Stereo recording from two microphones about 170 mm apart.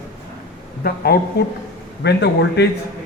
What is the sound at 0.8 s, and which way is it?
Speech, 65° left (ahead or behind).